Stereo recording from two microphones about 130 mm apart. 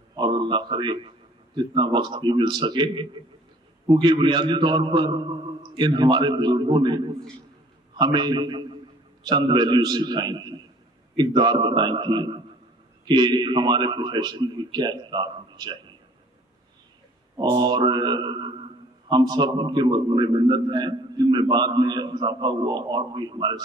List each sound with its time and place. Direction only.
0.1 s a man's voice: 40° right (ahead or behind)
17.4 s a man's voice: 35° right (ahead or behind)